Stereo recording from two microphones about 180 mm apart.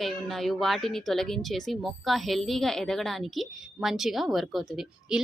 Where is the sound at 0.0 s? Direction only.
Centre (ahead or behind).